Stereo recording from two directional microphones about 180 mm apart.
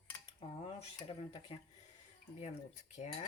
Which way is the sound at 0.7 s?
30° left (ahead or behind).